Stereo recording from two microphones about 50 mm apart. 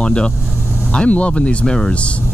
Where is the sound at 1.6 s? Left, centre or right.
Centre.